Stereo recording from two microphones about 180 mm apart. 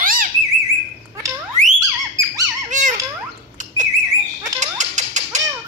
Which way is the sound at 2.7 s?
45° right (ahead or behind).